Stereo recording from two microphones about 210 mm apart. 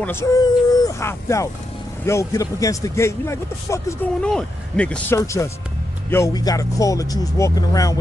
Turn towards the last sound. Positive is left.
turn(degrees=15)  # may be behind; listen again after turning